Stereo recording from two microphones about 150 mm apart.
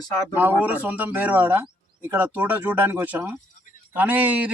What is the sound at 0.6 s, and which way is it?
Speech, 10° right (ahead or behind).